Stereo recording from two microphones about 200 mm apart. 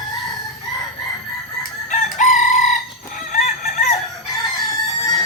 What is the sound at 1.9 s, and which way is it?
Chicken, 40° left (ahead or behind).